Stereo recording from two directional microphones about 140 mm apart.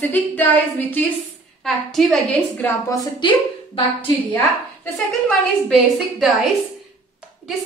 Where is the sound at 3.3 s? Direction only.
35° left (ahead or behind).